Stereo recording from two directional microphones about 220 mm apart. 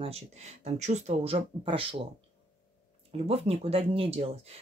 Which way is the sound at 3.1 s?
30° right (ahead or behind).